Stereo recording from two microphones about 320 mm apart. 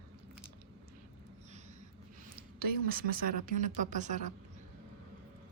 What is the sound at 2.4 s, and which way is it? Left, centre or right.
Speech, right.